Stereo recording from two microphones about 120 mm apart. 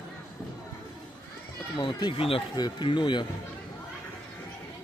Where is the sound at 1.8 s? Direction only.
40° left (ahead or behind).